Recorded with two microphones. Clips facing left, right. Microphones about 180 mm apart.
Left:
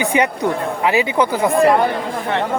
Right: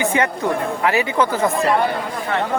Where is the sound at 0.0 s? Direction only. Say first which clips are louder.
Left 2 dB; 15° left (ahead or behind).